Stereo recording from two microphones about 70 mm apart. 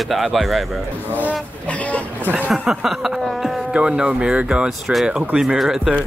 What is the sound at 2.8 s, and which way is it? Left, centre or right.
Speech, centre.